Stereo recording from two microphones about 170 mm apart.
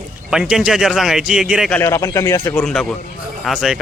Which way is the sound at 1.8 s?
15° left (ahead or behind).